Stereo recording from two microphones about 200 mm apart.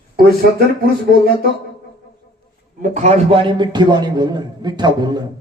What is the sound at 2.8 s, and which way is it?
A man's voice, 35° right (ahead or behind).